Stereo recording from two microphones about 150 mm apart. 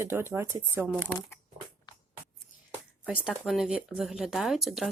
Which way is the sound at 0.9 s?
10° left (ahead or behind).